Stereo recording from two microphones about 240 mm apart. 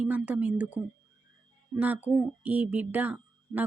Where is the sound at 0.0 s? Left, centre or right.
Centre.